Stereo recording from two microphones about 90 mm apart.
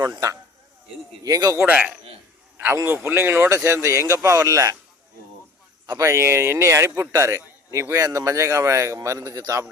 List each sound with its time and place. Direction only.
0.0 s a man's voice: 40° right (ahead or behind)
1.6 s a man's voice: 15° right (ahead or behind)
2.7 s a man's voice: 30° right (ahead or behind)
5.9 s a man's voice: 30° right (ahead or behind)